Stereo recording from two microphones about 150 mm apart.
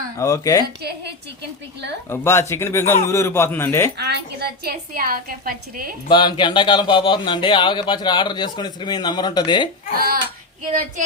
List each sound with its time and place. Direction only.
0.2 s a woman's voice: 20° left (ahead or behind)
0.8 s a woman's voice: 90° right
2.0 s a man's voice: 20° left (ahead or behind)
3.9 s a woman's voice: 90° right; by 5.9 s 75° right (ahead or behind)
6.1 s speech: 30° left (ahead or behind)
9.9 s a woman's voice: 85° right